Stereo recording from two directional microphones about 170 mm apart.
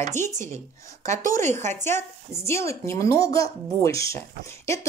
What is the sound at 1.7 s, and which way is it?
Speech, 15° left (ahead or behind).